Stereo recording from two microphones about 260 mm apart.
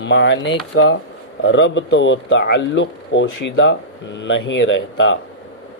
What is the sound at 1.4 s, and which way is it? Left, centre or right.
Speech, left.